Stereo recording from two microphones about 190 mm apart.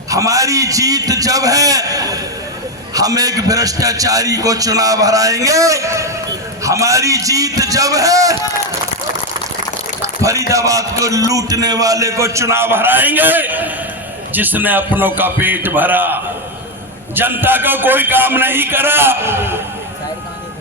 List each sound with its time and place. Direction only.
0.1 s a man's voice: 15° right (ahead or behind)
10.0 s a man's voice: 15° right (ahead or behind)